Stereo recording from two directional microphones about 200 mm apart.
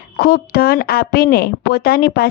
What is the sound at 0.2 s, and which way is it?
A woman's voice, 50° left (ahead or behind).